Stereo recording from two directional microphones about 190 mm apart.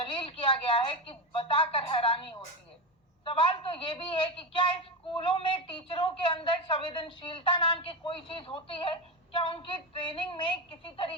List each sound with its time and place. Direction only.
0.1 s a woman's voice: 25° left (ahead or behind)